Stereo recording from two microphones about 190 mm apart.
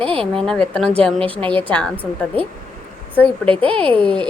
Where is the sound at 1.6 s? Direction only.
10° left (ahead or behind).